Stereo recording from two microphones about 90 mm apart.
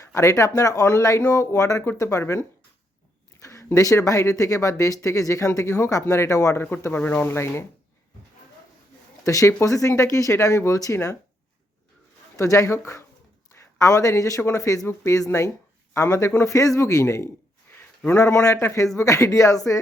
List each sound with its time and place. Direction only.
0.0 s speech: 30° left (ahead or behind)
6.7 s speech: 20° left (ahead or behind)
9.2 s speech: 35° left (ahead or behind)
12.4 s a man's voice: 35° left (ahead or behind)
18.4 s speech: 30° left (ahead or behind)